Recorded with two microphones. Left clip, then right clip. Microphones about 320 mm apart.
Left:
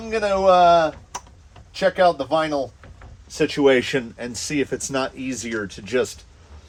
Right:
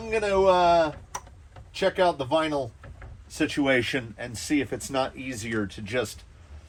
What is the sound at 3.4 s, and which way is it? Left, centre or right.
Speech, left.